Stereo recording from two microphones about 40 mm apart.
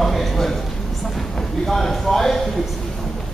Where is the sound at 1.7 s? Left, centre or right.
Centre.